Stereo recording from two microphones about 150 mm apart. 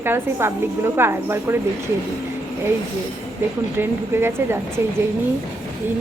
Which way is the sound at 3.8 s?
15° right (ahead or behind).